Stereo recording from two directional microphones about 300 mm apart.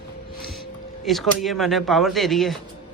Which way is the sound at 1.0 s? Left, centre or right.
Centre.